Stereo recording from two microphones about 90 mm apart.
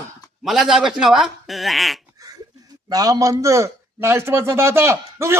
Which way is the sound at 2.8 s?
40° right (ahead or behind).